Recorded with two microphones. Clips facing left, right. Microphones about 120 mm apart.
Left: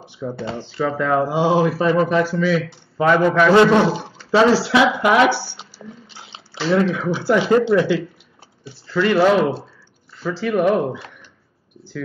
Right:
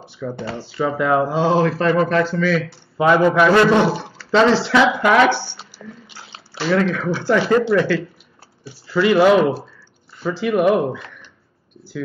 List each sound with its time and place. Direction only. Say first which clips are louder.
0.0 s a sound: even; 15° left (ahead or behind)
0.7 s speech: right 1 dB; 5° right (ahead or behind)
1.3 s speech: even; 10° left (ahead or behind)
3.0 s speech: right 1 dB; 10° right (ahead or behind)
3.9 s speech: even; 15° left (ahead or behind)
6.1 s squish: even; 20° left (ahead or behind)
6.7 s speech: even; 15° left (ahead or behind)
8.8 s speech: right 2 dB; 10° right (ahead or behind)